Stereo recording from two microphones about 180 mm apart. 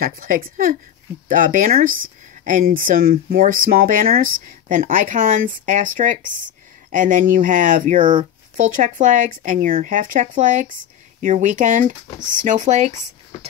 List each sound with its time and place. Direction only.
0.0 s speech: 50° right (ahead or behind)